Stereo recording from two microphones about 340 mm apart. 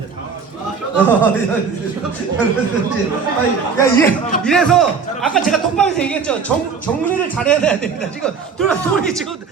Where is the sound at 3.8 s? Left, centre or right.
Centre.